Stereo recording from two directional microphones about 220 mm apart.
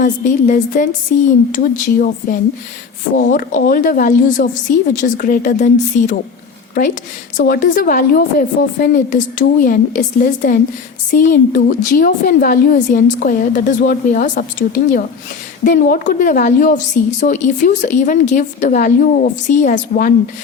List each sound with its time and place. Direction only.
0.0 s a woman's voice: 35° left (ahead or behind)
3.2 s a woman's voice: 35° left (ahead or behind)